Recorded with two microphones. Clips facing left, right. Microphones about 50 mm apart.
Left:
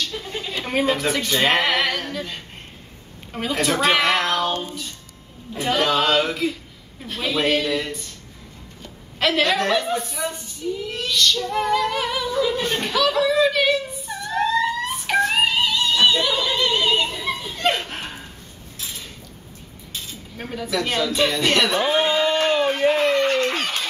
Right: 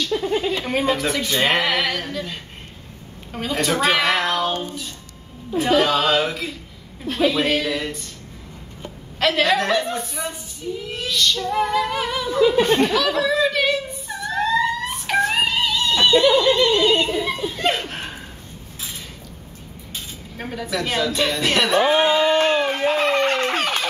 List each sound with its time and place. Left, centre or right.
0.1 s a sound: centre
0.5 s speech: centre
9.2 s speech: centre
12.4 s speech: right
12.8 s a sound: centre
17.2 s laughter: centre
20.3 s speech: centre
21.8 s a sound: centre
23.1 s speech: right